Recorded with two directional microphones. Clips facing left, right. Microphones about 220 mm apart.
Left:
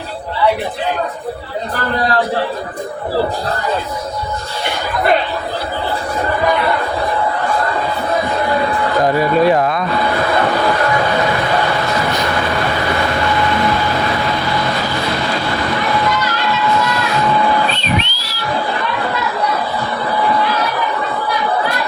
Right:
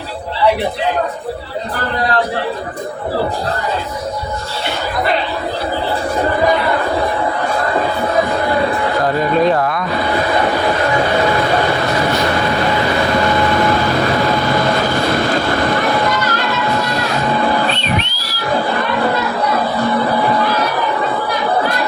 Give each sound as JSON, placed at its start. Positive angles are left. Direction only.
{"t": 9.1, "sound": "speech", "side_deg": 10}
{"t": 17.7, "sound": "whistle", "side_deg": 30}